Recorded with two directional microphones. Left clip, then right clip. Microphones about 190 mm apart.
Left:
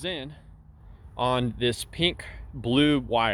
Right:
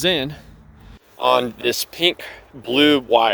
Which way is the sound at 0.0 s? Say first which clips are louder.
Right 14 dB; 40° right (ahead or behind).